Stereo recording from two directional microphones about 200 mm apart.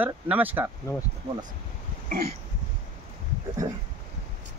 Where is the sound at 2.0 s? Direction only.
50° right (ahead or behind).